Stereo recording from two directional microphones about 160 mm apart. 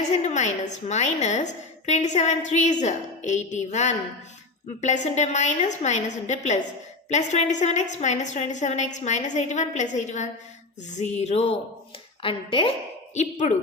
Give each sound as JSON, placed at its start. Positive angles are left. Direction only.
{"t": 0.1, "sound": "a woman's voice", "side_deg": 45}
{"t": 13.1, "sound": "a woman's voice", "side_deg": 50}